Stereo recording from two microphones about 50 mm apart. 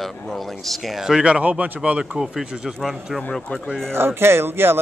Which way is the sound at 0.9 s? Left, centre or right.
Centre.